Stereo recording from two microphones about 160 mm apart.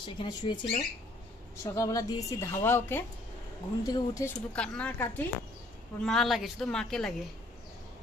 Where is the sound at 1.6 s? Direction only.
20° left (ahead or behind).